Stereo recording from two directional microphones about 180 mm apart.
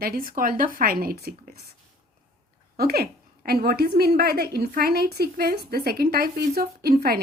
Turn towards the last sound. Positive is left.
turn(degrees=-55)  # may be behind; listen again after turning